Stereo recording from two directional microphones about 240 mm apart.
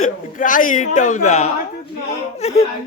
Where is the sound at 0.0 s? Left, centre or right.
Left.